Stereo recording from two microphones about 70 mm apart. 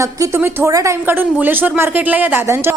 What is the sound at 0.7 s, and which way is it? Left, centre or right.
Speech, right.